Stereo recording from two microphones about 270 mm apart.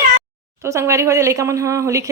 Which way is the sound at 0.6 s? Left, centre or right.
Centre.